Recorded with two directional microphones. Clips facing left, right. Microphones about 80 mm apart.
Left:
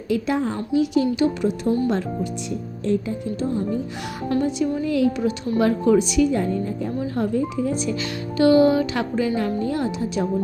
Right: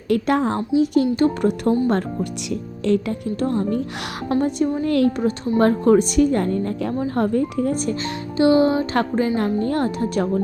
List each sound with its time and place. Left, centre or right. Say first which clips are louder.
0.1 s a woman's voice: right 3 dB; right
0.7 s a woman's voice: right 2 dB; right
1.1 s a woman's voice: right 2 dB; right
2.5 s a woman's voice: right 4 dB; right
4.3 s a woman's voice: right 2 dB; right
4.8 s a woman's voice: right 3 dB; right
5.5 s a woman's voice: right 3 dB; right
7.0 s a woman's voice: right 3 dB; right
8.0 s speech: even; right
9.0 s a woman's voice: right 3 dB; right